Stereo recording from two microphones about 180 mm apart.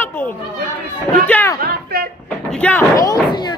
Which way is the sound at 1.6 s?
60° right (ahead or behind).